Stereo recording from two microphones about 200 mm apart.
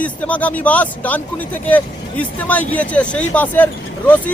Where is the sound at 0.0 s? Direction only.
5° left (ahead or behind).